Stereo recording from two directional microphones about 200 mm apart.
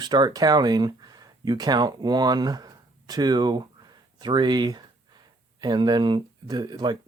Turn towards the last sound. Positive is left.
turn(degrees=-20)  # may be behind; listen again after turning